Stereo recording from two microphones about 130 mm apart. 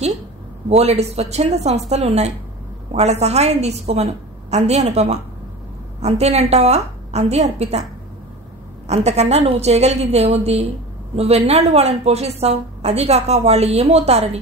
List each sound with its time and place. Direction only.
0.7 s a woman's voice: 55° right (ahead or behind)
8.8 s a woman's voice: 55° right (ahead or behind)